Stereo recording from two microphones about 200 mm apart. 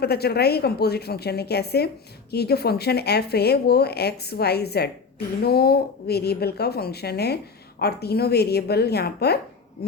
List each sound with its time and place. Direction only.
0.0 s speech: 55° left (ahead or behind)